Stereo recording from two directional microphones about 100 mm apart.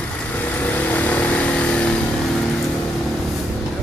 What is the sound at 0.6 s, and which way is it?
Vehicle, 15° left (ahead or behind).